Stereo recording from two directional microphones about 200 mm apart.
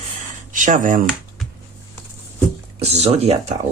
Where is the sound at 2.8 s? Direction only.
30° right (ahead or behind).